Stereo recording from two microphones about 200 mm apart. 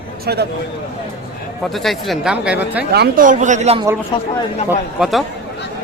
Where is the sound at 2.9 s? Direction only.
50° right (ahead or behind); by 3.8 s 35° right (ahead or behind).